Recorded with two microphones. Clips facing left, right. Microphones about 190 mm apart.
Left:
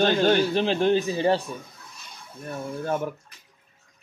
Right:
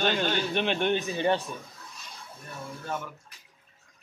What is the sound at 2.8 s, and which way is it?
Speech, 50° left (ahead or behind).